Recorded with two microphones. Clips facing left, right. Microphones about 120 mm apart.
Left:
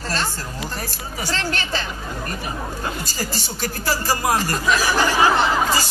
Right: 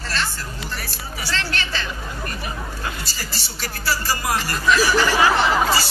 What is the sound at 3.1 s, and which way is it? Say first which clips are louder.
Speech: left 6 dB; 45° left (ahead or behind).